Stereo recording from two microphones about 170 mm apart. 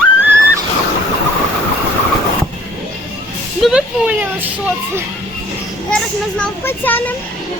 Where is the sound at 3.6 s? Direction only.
5° right (ahead or behind).